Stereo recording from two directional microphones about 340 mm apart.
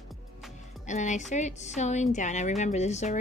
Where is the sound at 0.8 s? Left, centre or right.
Left.